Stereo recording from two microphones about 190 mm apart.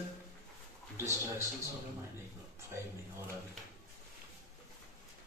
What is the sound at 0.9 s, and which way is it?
Speech, 15° right (ahead or behind).